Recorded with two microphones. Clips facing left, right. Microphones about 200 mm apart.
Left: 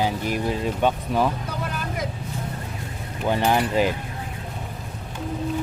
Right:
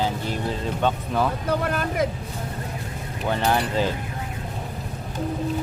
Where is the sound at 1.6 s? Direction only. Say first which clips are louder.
Right 5 dB; 60° right (ahead or behind).